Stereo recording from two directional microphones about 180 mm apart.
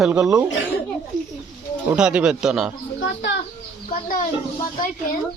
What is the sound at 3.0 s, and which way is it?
Speech, 90° left.